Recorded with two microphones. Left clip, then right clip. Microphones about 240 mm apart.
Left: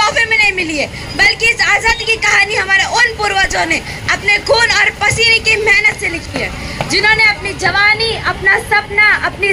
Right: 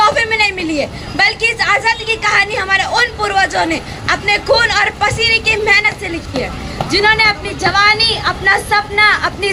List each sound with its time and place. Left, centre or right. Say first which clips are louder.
0.0 s a woman's voice: left 1 dB; right